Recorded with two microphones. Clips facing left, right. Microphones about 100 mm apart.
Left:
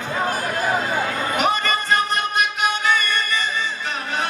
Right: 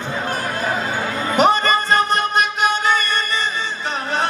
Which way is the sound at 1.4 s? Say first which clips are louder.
Right 7 dB; 30° right (ahead or behind).